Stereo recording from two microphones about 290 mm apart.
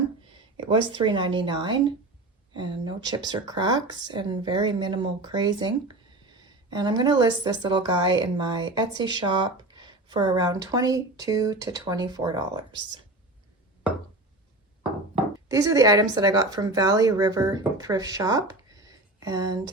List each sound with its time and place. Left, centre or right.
0.6 s speech: centre
15.1 s speech: centre